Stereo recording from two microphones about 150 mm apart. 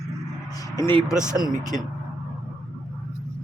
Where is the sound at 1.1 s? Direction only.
5° right (ahead or behind).